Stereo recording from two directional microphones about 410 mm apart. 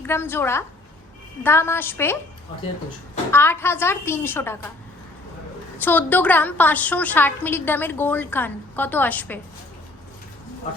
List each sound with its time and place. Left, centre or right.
0.0 s a woman's voice: centre
3.3 s a woman's voice: centre
5.8 s a woman's voice: centre